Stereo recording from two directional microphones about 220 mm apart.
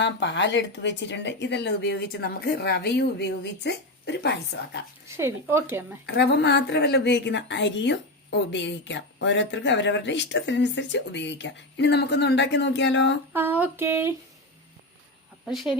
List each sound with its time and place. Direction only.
0.0 s a woman's voice: 55° left (ahead or behind)
5.0 s speech: 10° right (ahead or behind)
6.1 s a woman's voice: 50° left (ahead or behind)
13.3 s speech: 10° right (ahead or behind)
15.4 s speech: centre (ahead or behind)